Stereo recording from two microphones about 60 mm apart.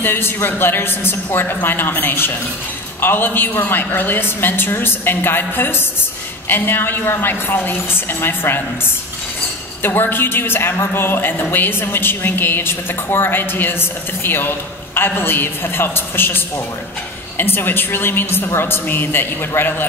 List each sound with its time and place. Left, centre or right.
0.0 s a woman's voice: left
9.8 s a woman's voice: left